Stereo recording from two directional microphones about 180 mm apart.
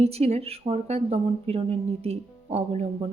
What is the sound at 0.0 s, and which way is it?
Speech, 35° right (ahead or behind).